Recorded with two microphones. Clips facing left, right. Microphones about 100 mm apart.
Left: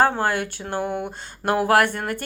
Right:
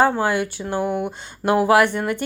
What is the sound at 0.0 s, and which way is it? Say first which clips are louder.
Speech: right 2 dB; 50° left (ahead or behind).